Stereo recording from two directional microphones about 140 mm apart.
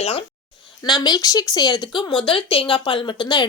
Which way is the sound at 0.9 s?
30° left (ahead or behind).